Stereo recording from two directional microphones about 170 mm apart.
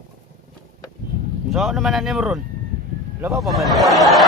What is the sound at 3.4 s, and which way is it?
Speech, centre (ahead or behind).